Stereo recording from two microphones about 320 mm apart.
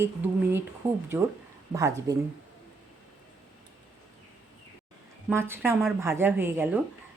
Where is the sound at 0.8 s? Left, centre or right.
Centre.